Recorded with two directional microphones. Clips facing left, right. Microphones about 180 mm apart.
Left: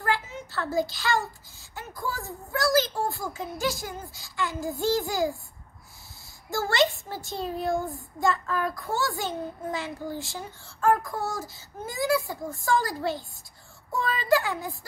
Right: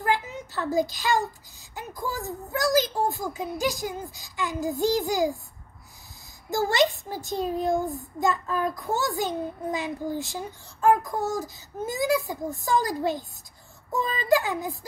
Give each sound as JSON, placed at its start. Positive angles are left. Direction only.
{"t": 0.0, "sound": "a sound", "side_deg": -15}
{"t": 1.8, "sound": "a child's voice", "side_deg": -15}
{"t": 6.5, "sound": "a child's voice", "side_deg": -15}